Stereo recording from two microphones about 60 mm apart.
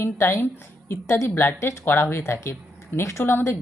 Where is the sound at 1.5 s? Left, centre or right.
Left.